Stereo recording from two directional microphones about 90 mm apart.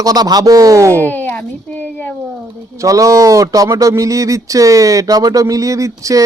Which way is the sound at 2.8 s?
40° right (ahead or behind).